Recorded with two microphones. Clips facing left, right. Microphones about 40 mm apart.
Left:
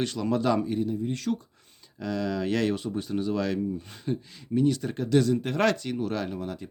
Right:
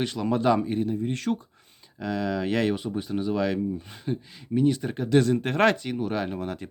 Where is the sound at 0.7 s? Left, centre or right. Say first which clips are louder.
Right 1 dB; right.